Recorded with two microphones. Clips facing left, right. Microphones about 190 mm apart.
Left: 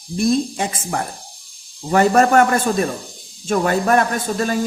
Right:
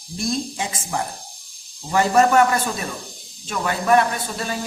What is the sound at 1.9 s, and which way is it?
Speech, 55° left (ahead or behind).